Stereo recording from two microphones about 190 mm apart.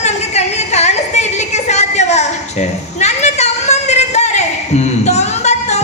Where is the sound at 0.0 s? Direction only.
35° left (ahead or behind).